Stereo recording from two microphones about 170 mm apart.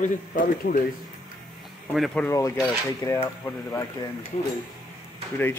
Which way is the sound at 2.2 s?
20° left (ahead or behind).